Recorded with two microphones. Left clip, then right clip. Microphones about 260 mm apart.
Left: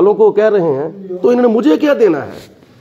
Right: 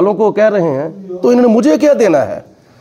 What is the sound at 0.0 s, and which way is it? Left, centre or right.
A man's voice, right.